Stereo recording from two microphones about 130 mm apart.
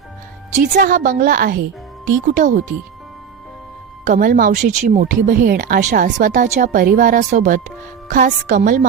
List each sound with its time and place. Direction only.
0.5 s speech: 85° right
2.4 s speech: 75° right (ahead or behind)
4.0 s speech: 90° right